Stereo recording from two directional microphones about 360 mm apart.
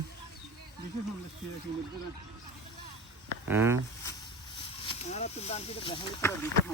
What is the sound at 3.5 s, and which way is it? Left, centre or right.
Speech, centre.